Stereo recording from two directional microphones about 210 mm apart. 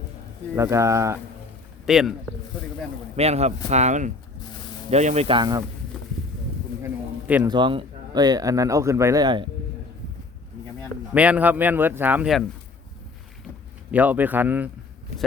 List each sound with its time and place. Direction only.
0.5 s speech: 15° right (ahead or behind)
1.9 s a man's voice: centre (ahead or behind)
3.2 s a man's voice: 30° right (ahead or behind)
6.8 s a sound: 5° right (ahead or behind)
7.4 s a man's voice: 20° right (ahead or behind)
11.1 s speech: 5° right (ahead or behind)
13.9 s speech: 10° right (ahead or behind)